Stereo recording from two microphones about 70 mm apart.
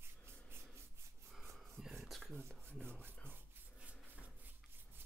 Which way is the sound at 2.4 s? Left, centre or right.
Right.